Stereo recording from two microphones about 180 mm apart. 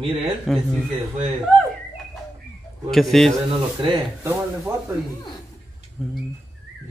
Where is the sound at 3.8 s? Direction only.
20° right (ahead or behind).